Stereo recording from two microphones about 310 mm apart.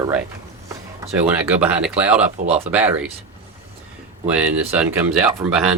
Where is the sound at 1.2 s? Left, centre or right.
Centre.